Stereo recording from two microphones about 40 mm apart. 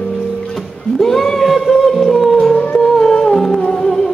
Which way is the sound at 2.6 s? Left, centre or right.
Left.